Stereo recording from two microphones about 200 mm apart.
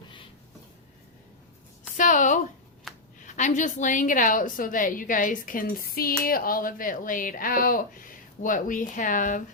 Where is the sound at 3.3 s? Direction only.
40° left (ahead or behind).